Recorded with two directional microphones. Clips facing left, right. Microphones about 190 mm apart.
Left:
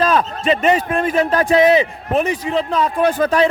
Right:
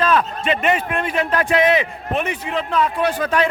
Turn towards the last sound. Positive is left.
turn(degrees=40)  # may be behind; listen again after turning